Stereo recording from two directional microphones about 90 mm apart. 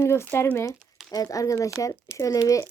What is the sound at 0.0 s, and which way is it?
Speech, 30° left (ahead or behind).